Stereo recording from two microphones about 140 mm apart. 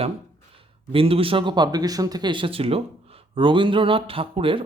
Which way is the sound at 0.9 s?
40° right (ahead or behind).